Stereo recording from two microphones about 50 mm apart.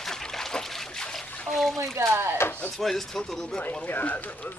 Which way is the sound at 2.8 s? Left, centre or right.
Centre.